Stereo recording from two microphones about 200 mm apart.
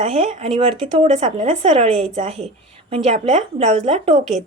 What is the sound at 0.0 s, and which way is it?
Speech, 30° right (ahead or behind).